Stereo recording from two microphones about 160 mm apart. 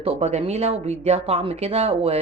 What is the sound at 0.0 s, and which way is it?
Speech, 40° right (ahead or behind).